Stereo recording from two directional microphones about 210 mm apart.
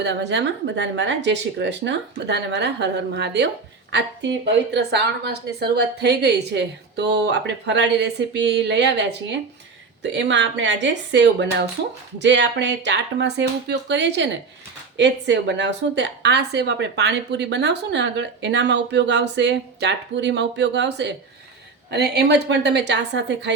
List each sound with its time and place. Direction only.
0.0 s a woman's voice: 55° right (ahead or behind)